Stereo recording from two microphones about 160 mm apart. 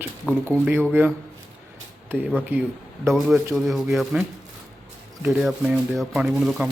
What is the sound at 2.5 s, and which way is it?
Speech, 10° right (ahead or behind).